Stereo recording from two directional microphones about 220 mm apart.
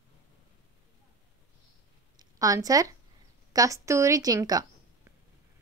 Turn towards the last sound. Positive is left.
turn(degrees=-15)  # may be behind; listen again after turning